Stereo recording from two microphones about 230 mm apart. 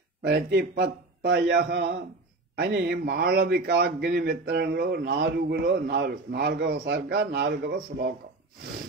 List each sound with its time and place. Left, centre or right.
0.2 s a man's voice: right